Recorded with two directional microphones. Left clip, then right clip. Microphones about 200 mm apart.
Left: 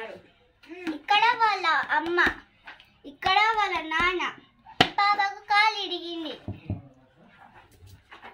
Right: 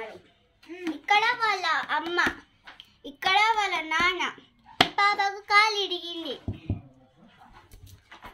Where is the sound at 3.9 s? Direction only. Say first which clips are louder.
Even; 45° right (ahead or behind).